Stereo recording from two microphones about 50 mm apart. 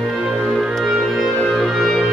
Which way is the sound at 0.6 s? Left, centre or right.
Centre.